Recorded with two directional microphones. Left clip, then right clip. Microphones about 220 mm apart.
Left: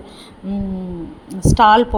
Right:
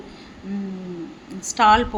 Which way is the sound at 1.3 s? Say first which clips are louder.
Left 4 dB; 25° left (ahead or behind).